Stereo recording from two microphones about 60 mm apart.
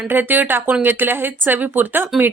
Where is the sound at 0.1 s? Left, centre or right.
Right.